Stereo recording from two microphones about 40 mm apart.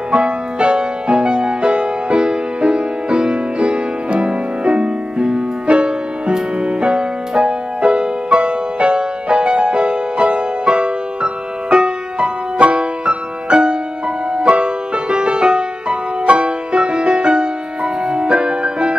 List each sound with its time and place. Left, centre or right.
0.1 s music: right